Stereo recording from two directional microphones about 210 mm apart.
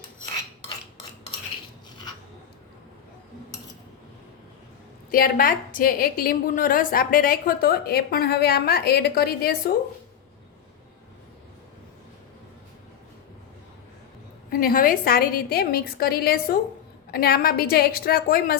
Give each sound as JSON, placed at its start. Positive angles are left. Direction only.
{"t": 5.1, "sound": "a woman's voice", "side_deg": 45}
{"t": 14.6, "sound": "a woman's voice", "side_deg": 40}